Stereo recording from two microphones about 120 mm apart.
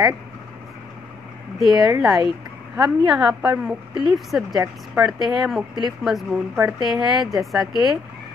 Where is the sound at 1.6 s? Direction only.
Centre (ahead or behind).